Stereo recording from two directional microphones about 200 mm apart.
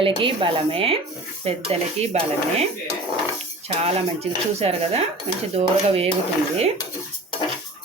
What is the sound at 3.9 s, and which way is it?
Dishes, 30° right (ahead or behind).